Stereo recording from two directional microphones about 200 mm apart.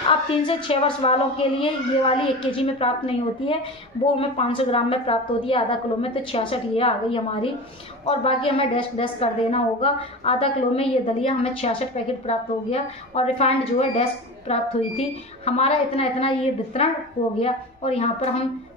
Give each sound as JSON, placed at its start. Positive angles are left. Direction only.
{"t": 0.4, "sound": "a woman's voice", "side_deg": 25}
{"t": 17.4, "sound": "a woman's voice", "side_deg": 30}